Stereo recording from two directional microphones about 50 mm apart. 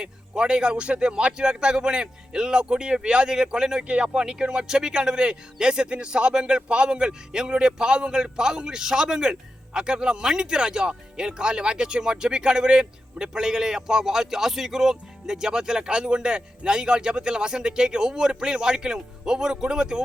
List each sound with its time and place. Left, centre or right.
0.0 s a man's voice: centre